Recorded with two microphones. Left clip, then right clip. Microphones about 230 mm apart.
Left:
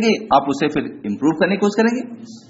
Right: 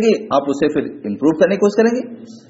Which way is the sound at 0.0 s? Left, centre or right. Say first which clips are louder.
Even; centre.